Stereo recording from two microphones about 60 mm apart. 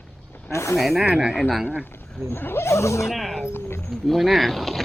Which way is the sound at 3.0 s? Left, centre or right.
Centre.